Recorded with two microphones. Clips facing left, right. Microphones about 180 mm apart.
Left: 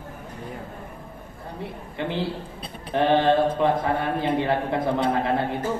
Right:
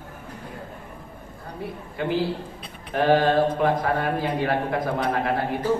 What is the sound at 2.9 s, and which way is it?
Speech, 25° left (ahead or behind).